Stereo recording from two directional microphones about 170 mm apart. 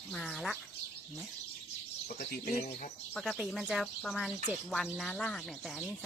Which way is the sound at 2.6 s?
45° left (ahead or behind).